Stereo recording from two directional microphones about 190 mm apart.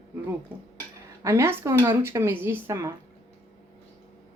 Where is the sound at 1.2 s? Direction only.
15° right (ahead or behind).